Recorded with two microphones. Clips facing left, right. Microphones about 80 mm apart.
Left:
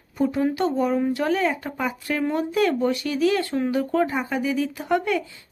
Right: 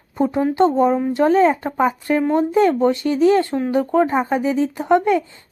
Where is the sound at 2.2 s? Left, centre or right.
Right.